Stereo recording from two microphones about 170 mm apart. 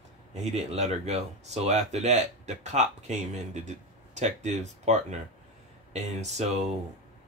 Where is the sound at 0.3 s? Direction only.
40° right (ahead or behind).